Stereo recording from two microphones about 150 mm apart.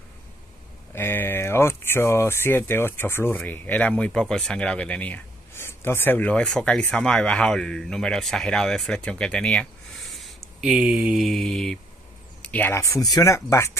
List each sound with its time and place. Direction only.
0.9 s speech: 15° left (ahead or behind)